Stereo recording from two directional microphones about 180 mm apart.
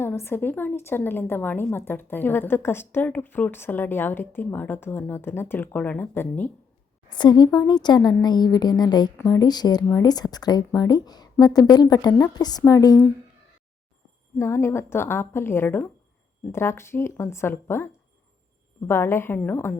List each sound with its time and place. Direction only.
0.0 s a woman's voice: 15° left (ahead or behind)
7.1 s speech: 25° left (ahead or behind)
14.3 s a woman's voice: 15° left (ahead or behind)
18.9 s a woman's voice: 15° left (ahead or behind)